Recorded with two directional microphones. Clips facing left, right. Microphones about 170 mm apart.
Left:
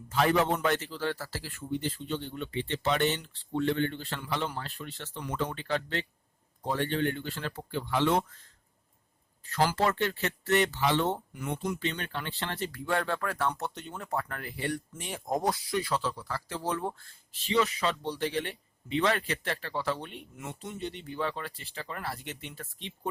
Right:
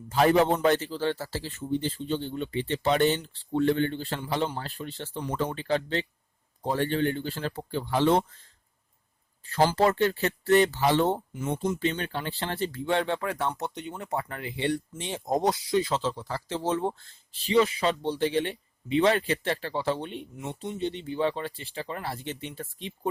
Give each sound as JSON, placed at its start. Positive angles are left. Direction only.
{"t": 0.1, "sound": "a man's voice", "side_deg": -35}
{"t": 9.5, "sound": "a man's voice", "side_deg": -30}
{"t": 11.3, "sound": "speech", "side_deg": -25}
{"t": 11.8, "sound": "a man's voice", "side_deg": -35}
{"t": 21.2, "sound": "speech", "side_deg": -30}